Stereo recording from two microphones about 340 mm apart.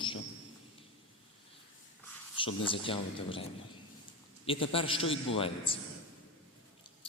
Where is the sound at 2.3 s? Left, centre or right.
Centre.